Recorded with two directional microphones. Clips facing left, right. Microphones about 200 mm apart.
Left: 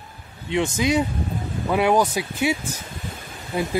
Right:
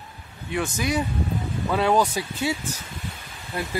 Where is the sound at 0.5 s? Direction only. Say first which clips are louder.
Left 4 dB; 20° left (ahead or behind).